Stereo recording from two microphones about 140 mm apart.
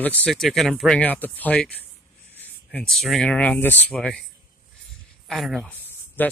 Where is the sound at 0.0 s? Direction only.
10° left (ahead or behind).